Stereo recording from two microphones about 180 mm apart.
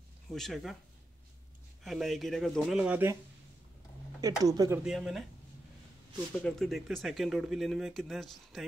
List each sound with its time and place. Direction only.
0.3 s speech: centre (ahead or behind)
1.8 s speech: centre (ahead or behind)
4.2 s speech: 20° right (ahead or behind)
4.8 s speech: centre (ahead or behind)
6.4 s speech: centre (ahead or behind)